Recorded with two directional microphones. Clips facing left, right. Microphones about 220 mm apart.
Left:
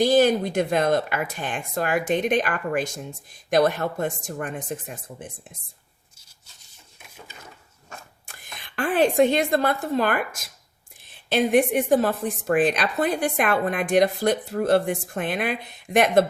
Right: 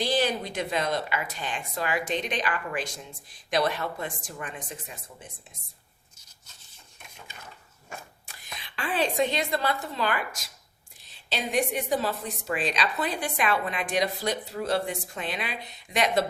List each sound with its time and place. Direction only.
0.0 s a woman's voice: 45° left (ahead or behind)
8.5 s a woman's voice: 50° left (ahead or behind)